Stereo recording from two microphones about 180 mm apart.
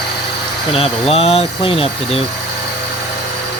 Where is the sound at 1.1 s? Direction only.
35° left (ahead or behind).